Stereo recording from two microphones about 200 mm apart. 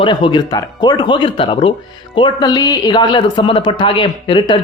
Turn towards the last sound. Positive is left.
turn(degrees=25)  # may be behind; listen again after turning